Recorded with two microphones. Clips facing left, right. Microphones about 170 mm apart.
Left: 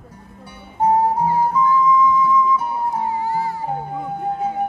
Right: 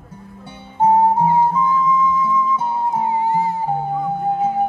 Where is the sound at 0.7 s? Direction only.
25° right (ahead or behind).